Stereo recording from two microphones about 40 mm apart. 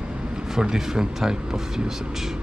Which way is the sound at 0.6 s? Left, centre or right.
Centre.